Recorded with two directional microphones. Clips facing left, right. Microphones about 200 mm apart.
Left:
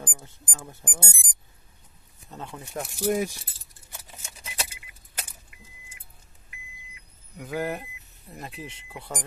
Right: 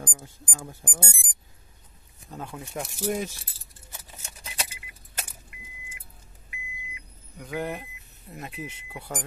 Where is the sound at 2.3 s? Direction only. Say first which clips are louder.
Right 1 dB; 10° right (ahead or behind).